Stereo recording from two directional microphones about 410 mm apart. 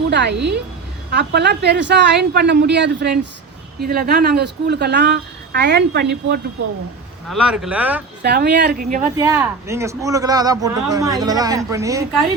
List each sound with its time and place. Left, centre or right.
0.1 s speech: right
7.3 s speech: centre
8.2 s speech: right
9.1 s speech: centre